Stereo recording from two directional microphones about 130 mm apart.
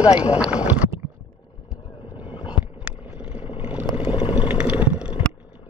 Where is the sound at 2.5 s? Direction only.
10° right (ahead or behind).